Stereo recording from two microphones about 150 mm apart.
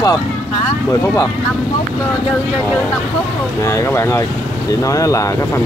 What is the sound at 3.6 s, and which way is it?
Speech, 20° left (ahead or behind).